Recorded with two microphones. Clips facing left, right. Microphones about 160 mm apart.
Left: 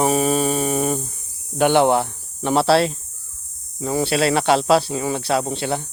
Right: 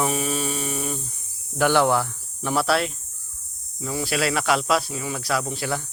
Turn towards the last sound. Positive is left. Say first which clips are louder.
# left 5 dB
turn(degrees=25)  # may be behind; listen again after turning